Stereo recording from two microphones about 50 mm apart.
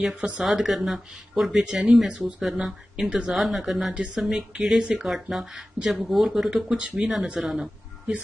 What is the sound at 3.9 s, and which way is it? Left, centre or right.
Speech, centre.